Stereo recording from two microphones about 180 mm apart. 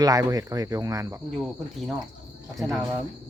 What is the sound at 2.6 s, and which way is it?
Speech, centre (ahead or behind).